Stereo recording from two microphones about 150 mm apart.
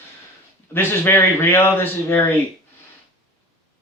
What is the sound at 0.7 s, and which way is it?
Speech, 15° left (ahead or behind).